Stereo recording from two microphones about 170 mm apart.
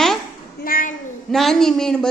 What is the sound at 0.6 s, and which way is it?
Speech, 55° left (ahead or behind).